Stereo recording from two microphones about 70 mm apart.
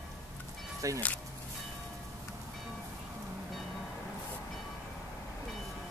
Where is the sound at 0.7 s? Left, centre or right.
Right.